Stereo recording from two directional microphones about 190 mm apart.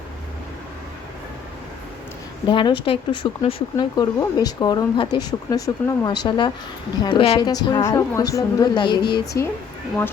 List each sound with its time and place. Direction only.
2.5 s speech: 25° left (ahead or behind)